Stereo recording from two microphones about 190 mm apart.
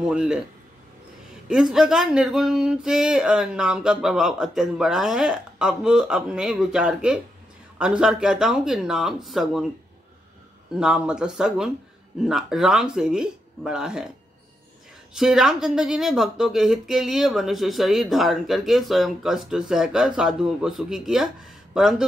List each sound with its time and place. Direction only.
0.0 s speech: 5° right (ahead or behind)
1.5 s speech: 5° right (ahead or behind)
10.7 s speech: 5° right (ahead or behind)
15.1 s speech: 5° right (ahead or behind)